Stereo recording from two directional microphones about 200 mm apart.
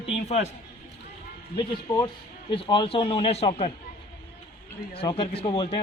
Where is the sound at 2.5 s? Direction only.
25° left (ahead or behind).